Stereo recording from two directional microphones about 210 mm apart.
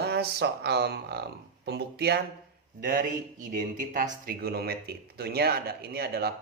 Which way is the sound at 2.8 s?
40° right (ahead or behind).